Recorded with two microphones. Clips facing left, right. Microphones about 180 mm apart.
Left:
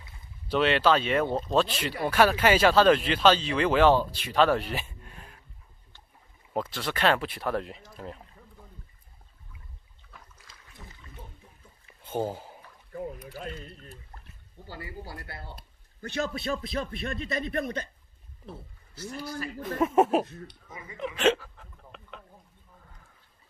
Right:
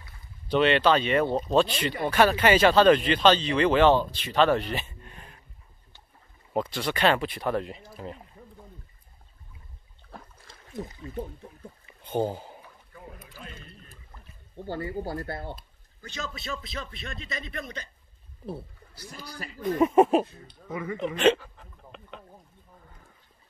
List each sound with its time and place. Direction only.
0.5 s speech: 5° left (ahead or behind)
6.5 s speech: centre (ahead or behind)
10.7 s speech: 40° right (ahead or behind)
12.0 s a sound: 5° left (ahead or behind)
14.7 s speech: 50° right (ahead or behind)
15.5 s speech: 60° left (ahead or behind)
19.6 s speech: centre (ahead or behind)
20.6 s speech: 60° right (ahead or behind)
21.2 s hiccup: 5° left (ahead or behind)